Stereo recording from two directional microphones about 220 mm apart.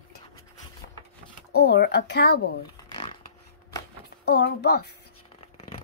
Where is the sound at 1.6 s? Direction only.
45° left (ahead or behind).